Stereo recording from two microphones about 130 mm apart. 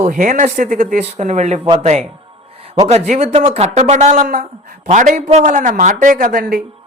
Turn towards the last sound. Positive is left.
turn(degrees=-90)